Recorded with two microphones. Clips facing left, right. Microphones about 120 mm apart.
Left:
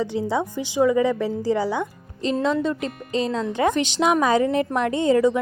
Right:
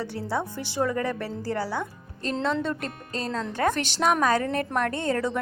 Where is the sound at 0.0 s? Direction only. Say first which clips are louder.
Left 6 dB; 15° left (ahead or behind).